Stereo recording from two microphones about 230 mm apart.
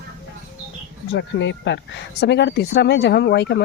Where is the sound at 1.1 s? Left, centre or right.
Left.